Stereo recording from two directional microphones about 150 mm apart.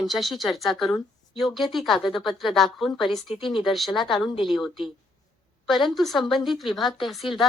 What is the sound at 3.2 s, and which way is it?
Speech, 35° left (ahead or behind).